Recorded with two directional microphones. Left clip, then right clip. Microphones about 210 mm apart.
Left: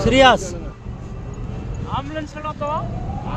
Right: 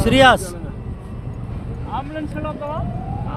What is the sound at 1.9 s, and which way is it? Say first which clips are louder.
Speech: even; 45° left (ahead or behind).